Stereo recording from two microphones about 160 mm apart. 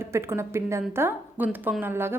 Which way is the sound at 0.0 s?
15° right (ahead or behind).